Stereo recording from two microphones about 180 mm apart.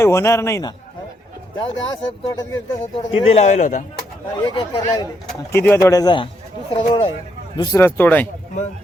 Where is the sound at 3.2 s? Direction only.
35° left (ahead or behind).